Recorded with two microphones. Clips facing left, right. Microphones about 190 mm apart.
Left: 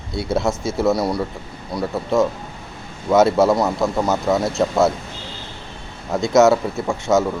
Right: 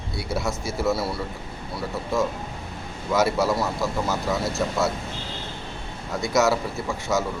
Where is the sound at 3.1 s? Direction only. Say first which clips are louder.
Left 7 dB; 25° left (ahead or behind).